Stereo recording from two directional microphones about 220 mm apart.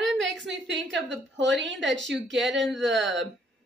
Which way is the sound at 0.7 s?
55° right (ahead or behind).